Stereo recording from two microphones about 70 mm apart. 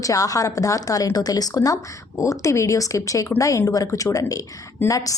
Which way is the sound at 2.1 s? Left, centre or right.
Left.